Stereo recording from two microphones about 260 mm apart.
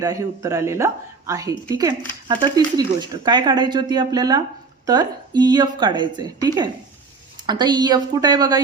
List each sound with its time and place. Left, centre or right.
0.0 s speech: centre